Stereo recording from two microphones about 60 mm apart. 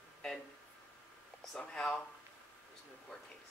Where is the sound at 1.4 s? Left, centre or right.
Centre.